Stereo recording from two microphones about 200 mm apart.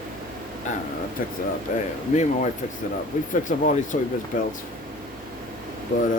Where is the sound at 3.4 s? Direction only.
40° left (ahead or behind).